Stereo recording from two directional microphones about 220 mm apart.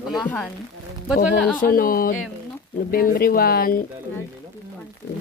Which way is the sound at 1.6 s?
40° left (ahead or behind).